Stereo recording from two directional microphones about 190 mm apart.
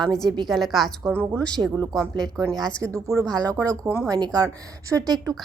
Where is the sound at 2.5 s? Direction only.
Centre (ahead or behind).